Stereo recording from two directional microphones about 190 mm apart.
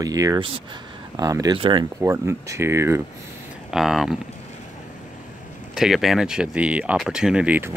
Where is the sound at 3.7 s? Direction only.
Centre (ahead or behind).